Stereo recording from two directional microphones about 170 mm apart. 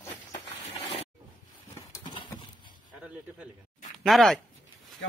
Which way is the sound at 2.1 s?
30° left (ahead or behind).